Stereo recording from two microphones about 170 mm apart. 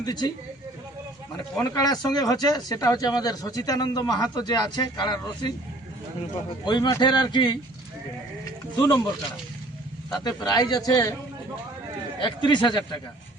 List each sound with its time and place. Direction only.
0.0 s speech: 25° left (ahead or behind)
1.6 s speech: 20° left (ahead or behind)
6.7 s speech: 25° left (ahead or behind)
8.4 s a sound: 20° left (ahead or behind)
10.1 s speech: 25° left (ahead or behind)
12.2 s speech: 25° left (ahead or behind)